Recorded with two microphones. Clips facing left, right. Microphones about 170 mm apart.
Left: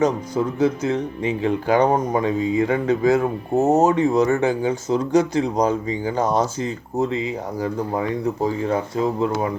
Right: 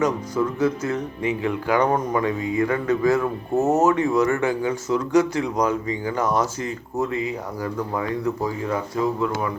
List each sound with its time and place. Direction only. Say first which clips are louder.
0.0 s speech: left 2 dB; 20° left (ahead or behind)
3.8 s speech: left 2 dB; 30° left (ahead or behind)